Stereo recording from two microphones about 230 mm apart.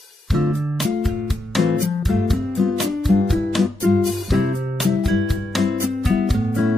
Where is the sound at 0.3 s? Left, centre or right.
Centre.